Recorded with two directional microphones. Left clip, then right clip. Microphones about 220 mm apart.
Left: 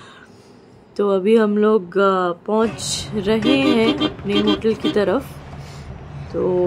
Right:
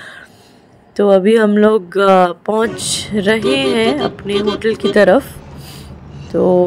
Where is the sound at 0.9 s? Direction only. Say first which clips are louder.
Right 5 dB; 20° right (ahead or behind).